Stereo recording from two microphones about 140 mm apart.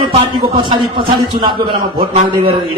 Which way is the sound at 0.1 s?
40° right (ahead or behind).